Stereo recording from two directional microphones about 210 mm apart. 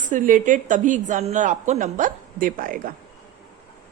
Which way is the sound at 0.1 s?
40° right (ahead or behind).